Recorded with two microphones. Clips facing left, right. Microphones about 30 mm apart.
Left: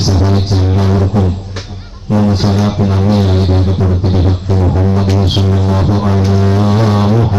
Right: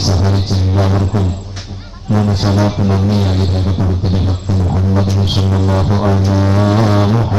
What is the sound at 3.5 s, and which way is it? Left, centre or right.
Music, centre.